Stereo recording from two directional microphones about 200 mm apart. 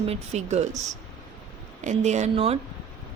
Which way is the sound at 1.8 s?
35° right (ahead or behind).